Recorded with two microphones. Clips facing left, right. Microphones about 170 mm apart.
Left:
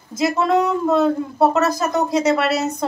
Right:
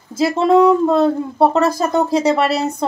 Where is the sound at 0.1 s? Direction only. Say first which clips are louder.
Right 4 dB; 30° right (ahead or behind).